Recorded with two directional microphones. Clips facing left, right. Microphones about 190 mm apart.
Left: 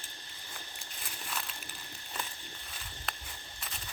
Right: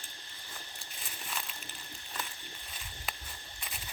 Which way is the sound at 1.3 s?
Centre (ahead or behind).